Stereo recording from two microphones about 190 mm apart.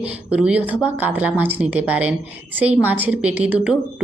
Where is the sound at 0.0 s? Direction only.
5° right (ahead or behind).